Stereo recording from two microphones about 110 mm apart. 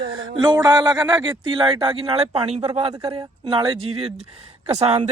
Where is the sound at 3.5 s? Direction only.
50° right (ahead or behind).